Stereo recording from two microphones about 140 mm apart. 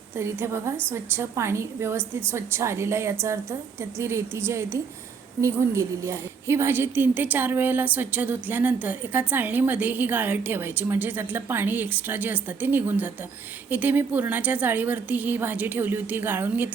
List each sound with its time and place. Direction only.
0.2 s a woman's voice: 20° right (ahead or behind)